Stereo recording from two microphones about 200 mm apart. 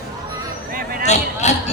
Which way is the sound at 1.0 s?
35° left (ahead or behind).